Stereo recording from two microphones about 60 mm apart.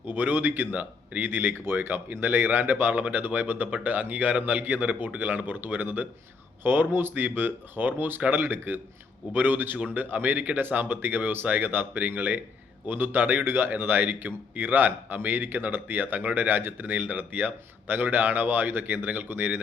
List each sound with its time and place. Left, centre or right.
0.1 s speech: right